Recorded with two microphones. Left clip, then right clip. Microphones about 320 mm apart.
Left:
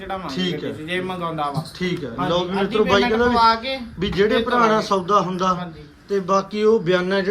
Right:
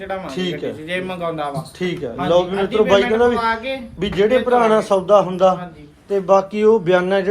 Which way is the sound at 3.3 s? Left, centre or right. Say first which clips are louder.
Left 3 dB; left.